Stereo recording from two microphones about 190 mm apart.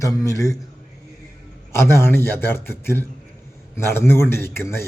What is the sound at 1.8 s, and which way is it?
Speech, 10° left (ahead or behind).